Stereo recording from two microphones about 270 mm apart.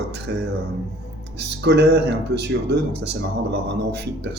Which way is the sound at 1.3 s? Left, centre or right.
Right.